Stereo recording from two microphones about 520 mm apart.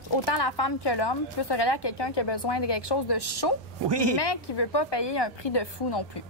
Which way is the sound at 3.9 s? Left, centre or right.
Right.